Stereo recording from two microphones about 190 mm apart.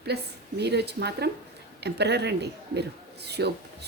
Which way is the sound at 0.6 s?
60° right (ahead or behind).